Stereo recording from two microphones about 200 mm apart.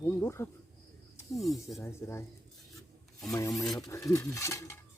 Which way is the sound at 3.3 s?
15° left (ahead or behind).